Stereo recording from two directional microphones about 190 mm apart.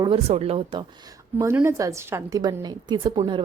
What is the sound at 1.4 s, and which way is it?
A woman's voice, 15° right (ahead or behind).